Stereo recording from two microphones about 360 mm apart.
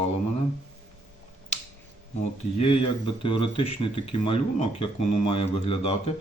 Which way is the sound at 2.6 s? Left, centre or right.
Centre.